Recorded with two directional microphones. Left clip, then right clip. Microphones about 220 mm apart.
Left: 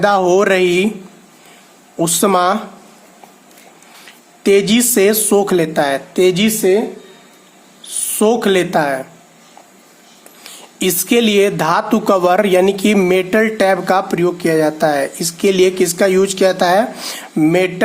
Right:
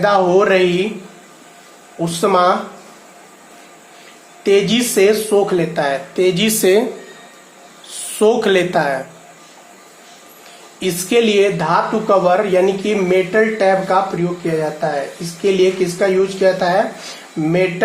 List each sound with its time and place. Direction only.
0.0 s speech: 35° left (ahead or behind)
2.0 s speech: 30° left (ahead or behind)
4.4 s speech: 30° left (ahead or behind)
6.6 s speech: 5° left (ahead or behind)
7.9 s speech: 25° left (ahead or behind)
10.8 s speech: 35° left (ahead or behind)